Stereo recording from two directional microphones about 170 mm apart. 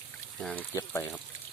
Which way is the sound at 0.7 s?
20° left (ahead or behind).